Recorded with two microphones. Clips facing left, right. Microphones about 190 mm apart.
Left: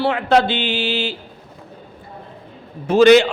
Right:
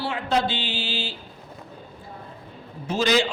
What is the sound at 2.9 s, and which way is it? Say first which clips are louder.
Speech: left 11 dB; 65° left (ahead or behind).